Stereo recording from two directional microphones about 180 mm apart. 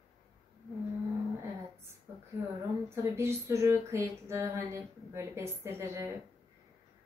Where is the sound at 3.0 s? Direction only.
15° right (ahead or behind).